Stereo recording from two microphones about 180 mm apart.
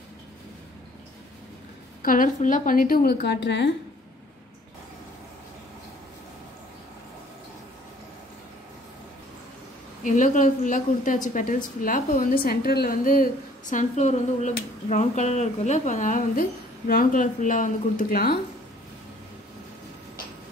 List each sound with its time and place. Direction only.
2.0 s a woman's voice: 45° left (ahead or behind); by 3.7 s 75° left (ahead or behind)
10.0 s a woman's voice: 45° left (ahead or behind)